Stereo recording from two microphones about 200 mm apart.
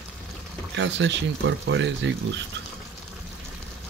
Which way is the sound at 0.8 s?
60° right (ahead or behind).